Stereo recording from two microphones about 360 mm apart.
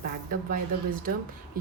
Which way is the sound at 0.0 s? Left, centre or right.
Right.